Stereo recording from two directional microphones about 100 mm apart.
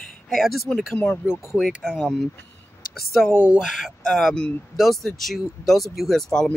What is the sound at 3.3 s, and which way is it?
Speech, 10° right (ahead or behind).